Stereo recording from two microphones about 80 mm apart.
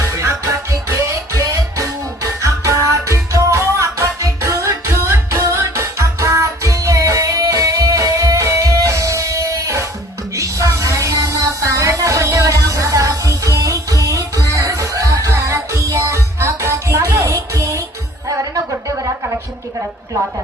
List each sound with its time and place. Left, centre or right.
0.1 s music: right